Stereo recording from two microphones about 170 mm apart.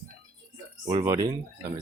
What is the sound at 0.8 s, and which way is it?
Speech, 20° right (ahead or behind).